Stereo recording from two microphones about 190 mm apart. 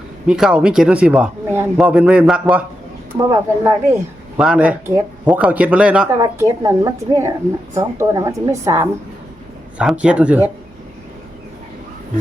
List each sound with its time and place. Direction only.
0.3 s speech: 5° right (ahead or behind)
3.2 s speech: 15° right (ahead or behind)
6.1 s speech: 20° right (ahead or behind)